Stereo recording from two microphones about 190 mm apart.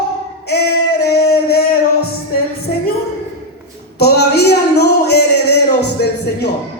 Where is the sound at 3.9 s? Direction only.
55° left (ahead or behind).